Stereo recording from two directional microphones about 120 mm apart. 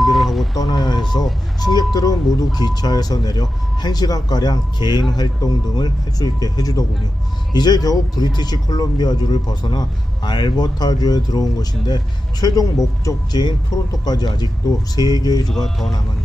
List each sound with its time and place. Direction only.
0.0 s vehicle: centre (ahead or behind)
0.6 s speech: 40° left (ahead or behind)
15.4 s speech: 5° left (ahead or behind)